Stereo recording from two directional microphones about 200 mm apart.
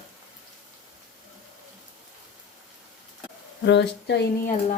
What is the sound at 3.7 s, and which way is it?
Speech, 60° left (ahead or behind).